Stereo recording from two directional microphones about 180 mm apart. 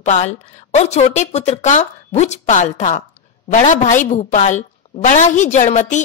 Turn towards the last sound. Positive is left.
turn(degrees=40)  # may be behind; listen again after turning